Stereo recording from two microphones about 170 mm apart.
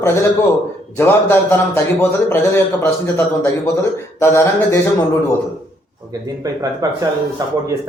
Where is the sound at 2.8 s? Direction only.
15° left (ahead or behind).